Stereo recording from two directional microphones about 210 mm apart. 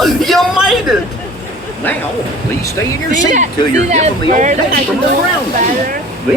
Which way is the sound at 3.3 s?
35° right (ahead or behind).